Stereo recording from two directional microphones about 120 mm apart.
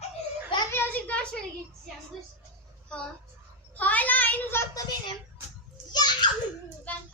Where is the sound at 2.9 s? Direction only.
10° left (ahead or behind).